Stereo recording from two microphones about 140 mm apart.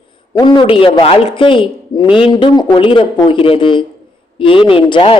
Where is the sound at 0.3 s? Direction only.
35° left (ahead or behind).